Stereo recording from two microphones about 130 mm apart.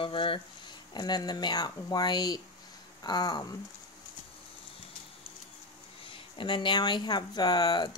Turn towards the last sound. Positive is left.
turn(degrees=30)  # may be behind; listen again after turning